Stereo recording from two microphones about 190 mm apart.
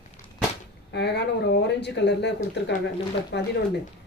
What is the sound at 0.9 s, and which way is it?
Speech, 60° left (ahead or behind).